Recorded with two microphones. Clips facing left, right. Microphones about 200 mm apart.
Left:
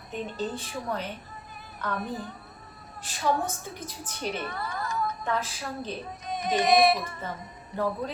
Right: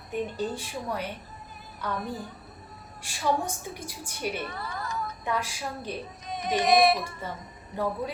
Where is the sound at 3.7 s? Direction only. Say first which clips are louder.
Even; 10° right (ahead or behind).